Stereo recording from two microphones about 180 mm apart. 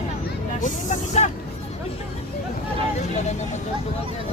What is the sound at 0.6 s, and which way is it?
Vehicle, 40° left (ahead or behind).